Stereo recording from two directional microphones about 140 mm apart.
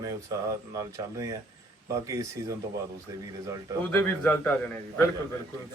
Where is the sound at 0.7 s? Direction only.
25° right (ahead or behind).